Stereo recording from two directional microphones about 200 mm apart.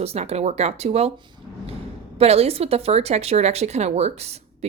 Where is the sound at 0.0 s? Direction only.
30° right (ahead or behind).